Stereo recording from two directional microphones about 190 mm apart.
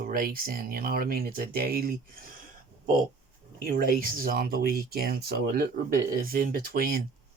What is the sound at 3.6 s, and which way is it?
Speech, 50° right (ahead or behind).